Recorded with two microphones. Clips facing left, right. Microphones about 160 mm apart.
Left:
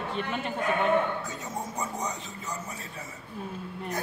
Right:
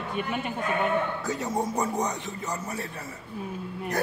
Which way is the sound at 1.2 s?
75° right (ahead or behind).